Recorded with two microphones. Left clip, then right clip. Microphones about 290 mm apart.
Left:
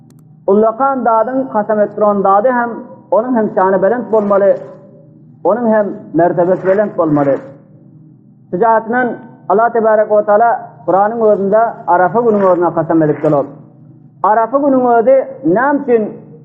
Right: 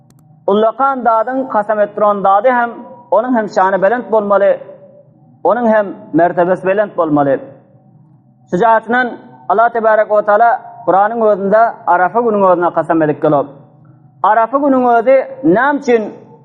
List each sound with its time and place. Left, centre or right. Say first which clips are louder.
0.4 s a man's voice: left 1 dB; right
8.4 s a man's voice: right 1 dB; right